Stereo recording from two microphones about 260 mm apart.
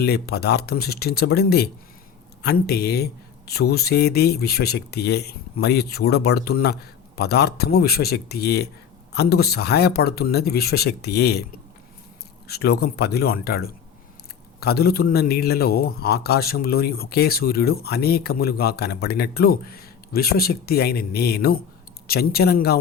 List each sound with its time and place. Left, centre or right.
0.0 s a man's voice: left
12.5 s a man's voice: left